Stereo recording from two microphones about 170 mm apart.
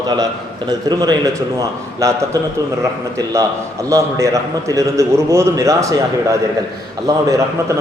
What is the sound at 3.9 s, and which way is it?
A man's voice, 20° right (ahead or behind).